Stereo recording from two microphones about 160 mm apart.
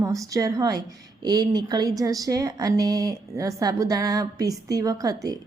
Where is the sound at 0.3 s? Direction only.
20° right (ahead or behind).